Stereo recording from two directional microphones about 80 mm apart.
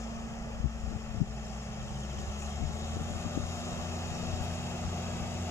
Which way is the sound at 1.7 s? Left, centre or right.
Left.